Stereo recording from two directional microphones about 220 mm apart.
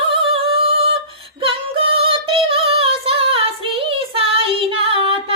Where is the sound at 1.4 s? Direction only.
25° right (ahead or behind).